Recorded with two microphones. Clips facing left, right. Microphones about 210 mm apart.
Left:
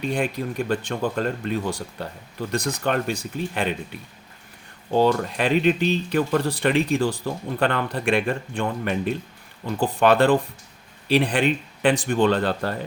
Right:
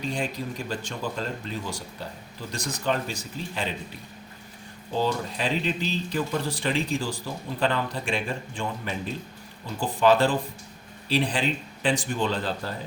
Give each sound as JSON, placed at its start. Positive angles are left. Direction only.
{"t": 0.0, "sound": "speech", "side_deg": 60}
{"t": 4.9, "sound": "speech", "side_deg": 60}